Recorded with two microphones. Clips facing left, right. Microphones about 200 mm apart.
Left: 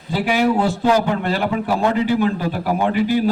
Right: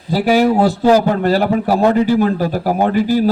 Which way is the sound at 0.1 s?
40° right (ahead or behind).